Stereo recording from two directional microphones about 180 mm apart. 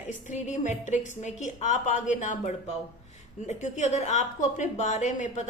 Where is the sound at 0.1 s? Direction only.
45° left (ahead or behind).